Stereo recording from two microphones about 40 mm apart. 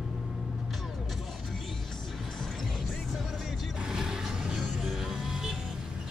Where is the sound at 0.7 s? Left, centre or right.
Centre.